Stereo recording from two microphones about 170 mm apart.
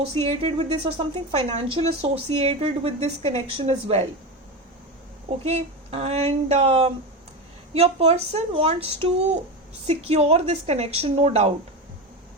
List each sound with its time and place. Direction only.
0.0 s a woman's voice: 35° right (ahead or behind)
5.5 s a woman's voice: 40° right (ahead or behind)